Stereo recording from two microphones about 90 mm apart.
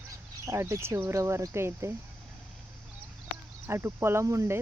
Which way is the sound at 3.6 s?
30° right (ahead or behind).